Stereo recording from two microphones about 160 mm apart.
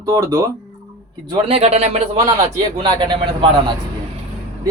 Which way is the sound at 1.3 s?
35° right (ahead or behind).